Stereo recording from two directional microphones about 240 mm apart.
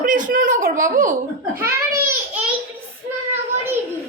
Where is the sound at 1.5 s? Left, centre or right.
Centre.